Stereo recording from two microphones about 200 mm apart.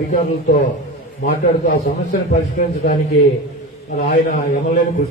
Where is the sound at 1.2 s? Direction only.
40° left (ahead or behind).